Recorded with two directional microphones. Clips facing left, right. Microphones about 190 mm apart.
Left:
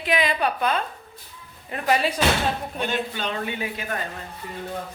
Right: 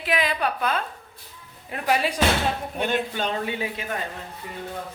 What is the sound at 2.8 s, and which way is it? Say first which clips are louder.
Speech: right 2 dB; 55° right (ahead or behind).